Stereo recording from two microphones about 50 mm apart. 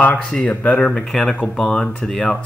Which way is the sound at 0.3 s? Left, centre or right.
Left.